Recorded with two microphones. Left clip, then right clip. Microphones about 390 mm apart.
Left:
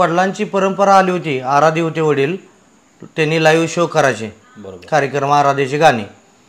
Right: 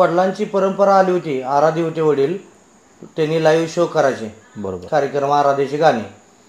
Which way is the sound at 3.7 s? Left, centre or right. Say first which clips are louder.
Left 2 dB; left.